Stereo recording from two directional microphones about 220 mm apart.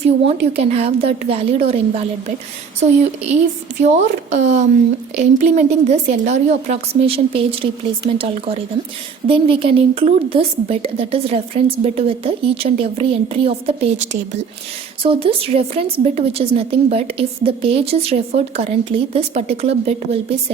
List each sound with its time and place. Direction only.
0.3 s a woman's voice: 25° right (ahead or behind)
3.9 s a woman's voice: 30° right (ahead or behind)